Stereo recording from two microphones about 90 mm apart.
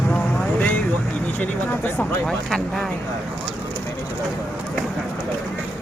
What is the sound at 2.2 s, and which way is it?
Speech, 5° left (ahead or behind).